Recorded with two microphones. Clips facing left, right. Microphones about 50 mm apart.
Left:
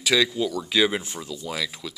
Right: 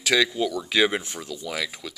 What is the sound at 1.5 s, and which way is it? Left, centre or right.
Speech, centre.